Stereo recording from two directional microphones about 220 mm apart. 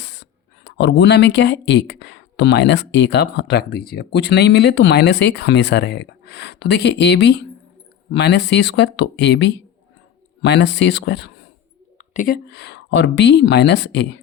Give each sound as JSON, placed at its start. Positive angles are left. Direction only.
{"t": 0.0, "sound": "speech", "side_deg": 50}
{"t": 12.1, "sound": "speech", "side_deg": 40}